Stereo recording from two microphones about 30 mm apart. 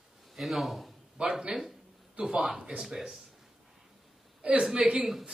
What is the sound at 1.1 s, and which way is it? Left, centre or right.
Speech, right.